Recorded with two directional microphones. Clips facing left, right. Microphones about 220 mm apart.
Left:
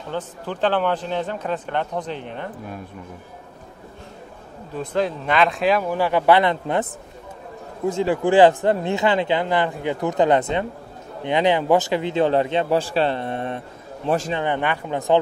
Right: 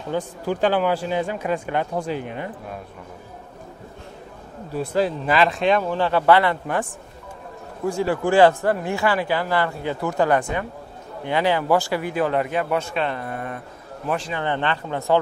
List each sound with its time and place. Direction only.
0.1 s speech: 10° right (ahead or behind)
4.7 s speech: 5° right (ahead or behind); by 13.6 s 25° left (ahead or behind)
14.3 s speech: 15° left (ahead or behind)